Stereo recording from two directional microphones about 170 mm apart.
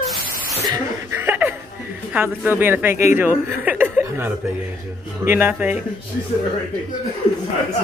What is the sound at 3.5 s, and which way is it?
Chuckle, 10° right (ahead or behind).